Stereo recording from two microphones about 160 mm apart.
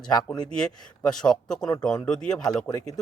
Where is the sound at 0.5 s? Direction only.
5° left (ahead or behind).